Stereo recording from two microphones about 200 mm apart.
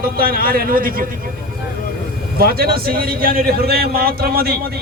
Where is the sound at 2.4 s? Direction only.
50° right (ahead or behind).